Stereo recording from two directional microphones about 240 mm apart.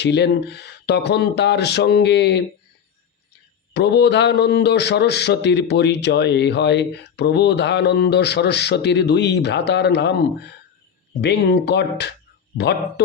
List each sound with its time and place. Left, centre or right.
0.0 s a man's voice: left
3.8 s a man's voice: left